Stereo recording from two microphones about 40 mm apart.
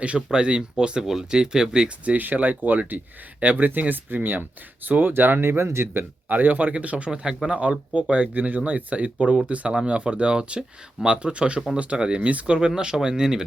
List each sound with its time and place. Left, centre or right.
0.3 s speech: right
1.0 s speech: centre
2.0 s speech: right
5.5 s speech: right
6.2 s speech: right
7.1 s speech: centre; by 9.1 s right
9.1 s speech: right
12.5 s speech: centre